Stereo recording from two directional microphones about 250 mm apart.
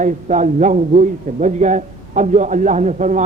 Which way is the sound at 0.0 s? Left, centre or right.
Right.